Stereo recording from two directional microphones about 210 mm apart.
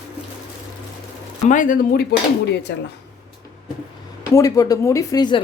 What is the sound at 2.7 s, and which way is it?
Speech, 55° left (ahead or behind).